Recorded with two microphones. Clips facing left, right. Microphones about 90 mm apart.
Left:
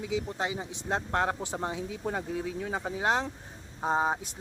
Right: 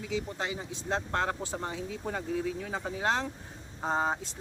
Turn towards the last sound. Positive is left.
turn(degrees=10)  # may be behind; listen again after turning